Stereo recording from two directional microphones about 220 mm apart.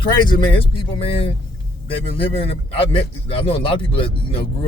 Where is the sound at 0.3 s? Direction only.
25° left (ahead or behind).